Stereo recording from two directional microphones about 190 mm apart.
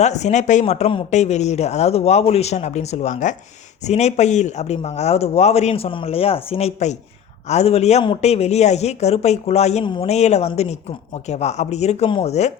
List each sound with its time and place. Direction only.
0.0 s speech: 35° left (ahead or behind)